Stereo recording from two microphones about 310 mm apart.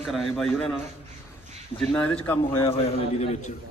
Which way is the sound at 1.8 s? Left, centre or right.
Centre.